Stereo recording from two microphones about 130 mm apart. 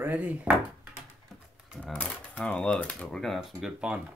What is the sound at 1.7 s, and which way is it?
Typewriter, 5° right (ahead or behind).